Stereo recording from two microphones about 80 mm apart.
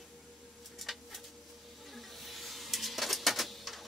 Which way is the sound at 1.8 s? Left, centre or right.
Centre.